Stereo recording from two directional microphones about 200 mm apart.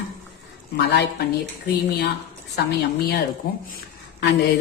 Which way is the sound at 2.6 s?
55° left (ahead or behind).